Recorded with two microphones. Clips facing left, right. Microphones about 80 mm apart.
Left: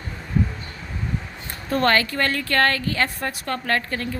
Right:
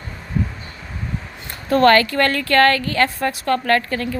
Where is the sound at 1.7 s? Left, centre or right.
Right.